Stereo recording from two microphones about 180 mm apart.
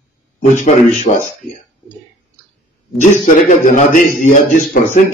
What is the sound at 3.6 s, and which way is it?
A man's voice, 45° left (ahead or behind).